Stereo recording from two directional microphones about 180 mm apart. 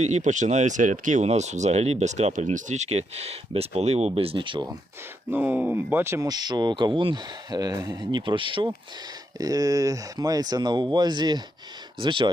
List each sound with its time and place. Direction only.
0.0 s speech: 40° right (ahead or behind); by 4.8 s 25° right (ahead or behind)
5.3 s speech: 10° right (ahead or behind); by 12.3 s 25° right (ahead or behind)